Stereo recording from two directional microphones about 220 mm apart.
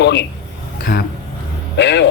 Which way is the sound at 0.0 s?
50° left (ahead or behind).